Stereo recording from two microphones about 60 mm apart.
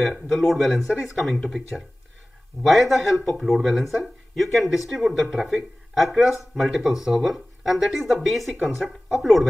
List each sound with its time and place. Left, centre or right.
0.0 s speech: centre